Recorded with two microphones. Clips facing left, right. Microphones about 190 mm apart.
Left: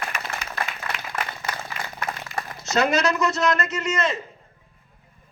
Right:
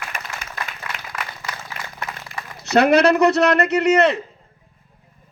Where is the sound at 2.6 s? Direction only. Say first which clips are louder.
Right 7 dB; 60° right (ahead or behind).